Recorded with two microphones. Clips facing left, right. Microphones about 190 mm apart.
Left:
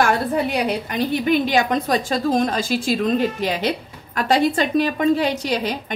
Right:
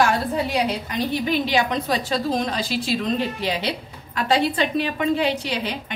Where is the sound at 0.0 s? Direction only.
55° left (ahead or behind).